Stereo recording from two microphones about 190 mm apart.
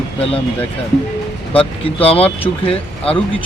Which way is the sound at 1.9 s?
30° left (ahead or behind).